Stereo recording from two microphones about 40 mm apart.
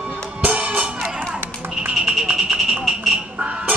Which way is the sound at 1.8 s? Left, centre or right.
Right.